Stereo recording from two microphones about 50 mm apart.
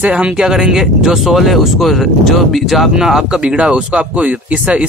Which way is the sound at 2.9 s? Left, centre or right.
Centre.